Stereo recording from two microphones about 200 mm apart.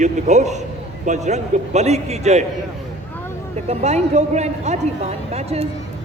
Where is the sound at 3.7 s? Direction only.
35° right (ahead or behind).